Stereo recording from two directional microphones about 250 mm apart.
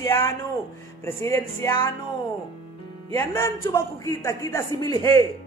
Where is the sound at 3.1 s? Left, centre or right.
Centre.